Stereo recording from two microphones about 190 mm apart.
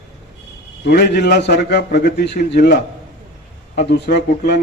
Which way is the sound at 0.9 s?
60° left (ahead or behind).